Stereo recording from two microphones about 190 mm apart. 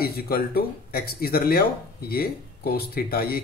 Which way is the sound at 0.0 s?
55° left (ahead or behind).